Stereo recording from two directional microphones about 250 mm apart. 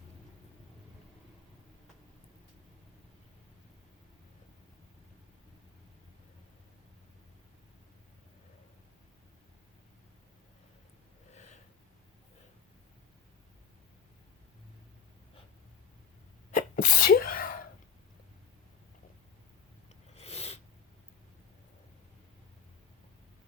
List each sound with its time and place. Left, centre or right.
11.3 s gasp: left
16.6 s sneeze: left
19.9 s a sound: left